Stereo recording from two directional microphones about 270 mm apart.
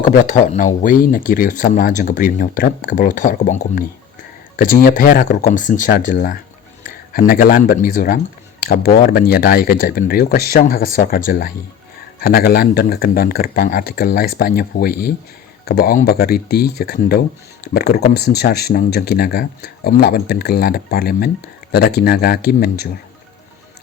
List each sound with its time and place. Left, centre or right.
0.0 s speech: left